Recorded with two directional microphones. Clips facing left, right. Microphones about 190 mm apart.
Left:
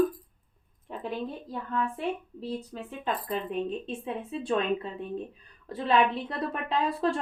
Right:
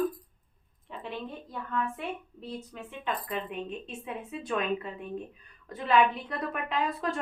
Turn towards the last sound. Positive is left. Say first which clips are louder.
# left 4 dB
turn(degrees=30)  # may be behind; listen again after turning